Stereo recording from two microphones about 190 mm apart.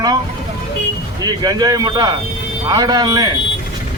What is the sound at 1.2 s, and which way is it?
Speech, 20° right (ahead or behind).